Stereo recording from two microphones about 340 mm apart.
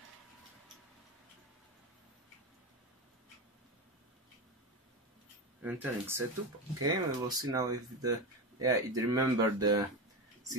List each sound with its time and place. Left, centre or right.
5.6 s speech: centre